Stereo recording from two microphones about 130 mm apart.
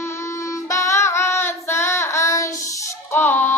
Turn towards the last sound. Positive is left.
turn(degrees=20)  # may be behind; listen again after turning